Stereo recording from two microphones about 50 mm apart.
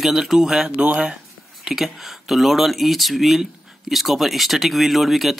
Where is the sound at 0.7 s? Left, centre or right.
Right.